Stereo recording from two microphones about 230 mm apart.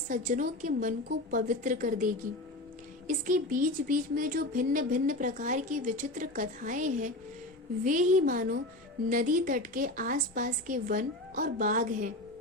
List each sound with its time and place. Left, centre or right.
0.1 s speech: right
3.1 s speech: right